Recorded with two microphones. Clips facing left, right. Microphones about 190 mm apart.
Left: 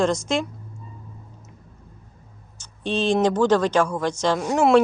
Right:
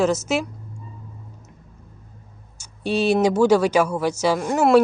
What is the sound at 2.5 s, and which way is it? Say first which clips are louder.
Speech: right 2 dB; 10° right (ahead or behind).